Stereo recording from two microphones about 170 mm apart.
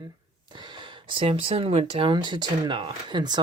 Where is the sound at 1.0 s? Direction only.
30° right (ahead or behind).